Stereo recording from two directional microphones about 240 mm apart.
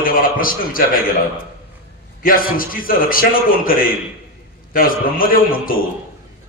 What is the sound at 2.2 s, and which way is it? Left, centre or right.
A man's voice, left.